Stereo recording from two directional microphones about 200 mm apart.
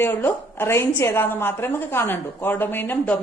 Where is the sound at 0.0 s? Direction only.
10° left (ahead or behind).